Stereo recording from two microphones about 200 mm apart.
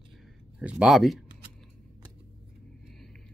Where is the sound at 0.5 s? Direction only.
5° right (ahead or behind).